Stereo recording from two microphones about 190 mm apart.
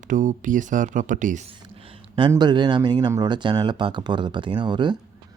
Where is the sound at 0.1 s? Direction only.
40° right (ahead or behind).